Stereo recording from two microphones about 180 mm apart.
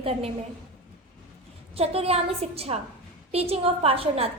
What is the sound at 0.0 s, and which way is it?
Speech, 35° right (ahead or behind).